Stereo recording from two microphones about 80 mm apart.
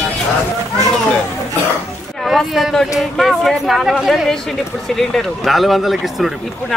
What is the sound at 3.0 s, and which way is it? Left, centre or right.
Speech, centre.